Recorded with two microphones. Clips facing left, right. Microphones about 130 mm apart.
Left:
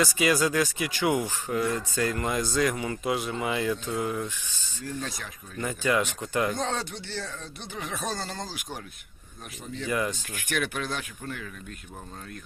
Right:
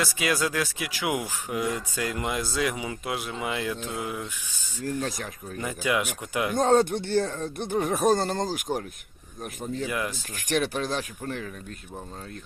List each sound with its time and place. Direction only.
0.0 s speech: centre (ahead or behind)
4.8 s speech: 40° right (ahead or behind)
5.5 s speech: 10° right (ahead or behind)
6.6 s speech: 50° right (ahead or behind)
9.8 s speech: 5° right (ahead or behind)
10.2 s speech: 35° right (ahead or behind)